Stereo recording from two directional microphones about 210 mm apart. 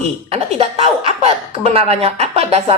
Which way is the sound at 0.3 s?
30° right (ahead or behind).